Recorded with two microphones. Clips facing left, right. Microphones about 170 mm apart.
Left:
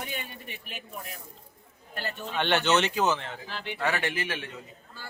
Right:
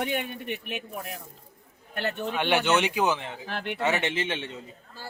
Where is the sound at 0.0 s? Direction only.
65° right (ahead or behind).